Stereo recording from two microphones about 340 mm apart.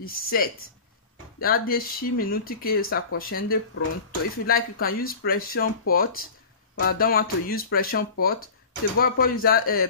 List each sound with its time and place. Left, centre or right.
0.0 s speech: left